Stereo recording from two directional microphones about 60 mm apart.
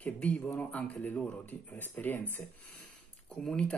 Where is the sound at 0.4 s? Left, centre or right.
Left.